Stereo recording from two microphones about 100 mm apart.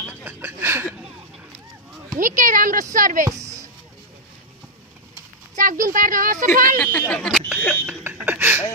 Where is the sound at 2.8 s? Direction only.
35° right (ahead or behind).